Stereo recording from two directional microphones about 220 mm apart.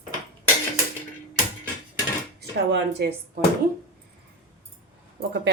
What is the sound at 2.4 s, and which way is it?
Speech, 50° right (ahead or behind).